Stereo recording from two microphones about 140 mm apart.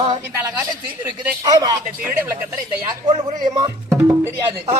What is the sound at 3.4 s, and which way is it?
Speech, 30° right (ahead or behind).